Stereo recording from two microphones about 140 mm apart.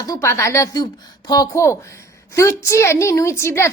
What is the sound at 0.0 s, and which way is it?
Speech, 20° left (ahead or behind).